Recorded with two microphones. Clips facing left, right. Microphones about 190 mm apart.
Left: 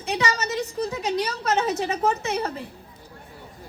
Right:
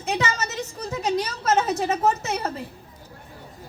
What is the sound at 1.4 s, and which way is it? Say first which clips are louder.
A woman's voice: right 3 dB; 40° right (ahead or behind).